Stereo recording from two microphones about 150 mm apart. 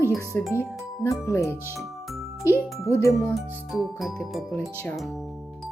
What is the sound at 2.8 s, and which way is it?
Speech, 20° left (ahead or behind).